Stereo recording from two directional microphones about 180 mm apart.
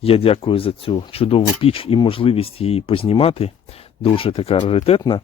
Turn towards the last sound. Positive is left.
turn(degrees=25)  # may be behind; listen again after turning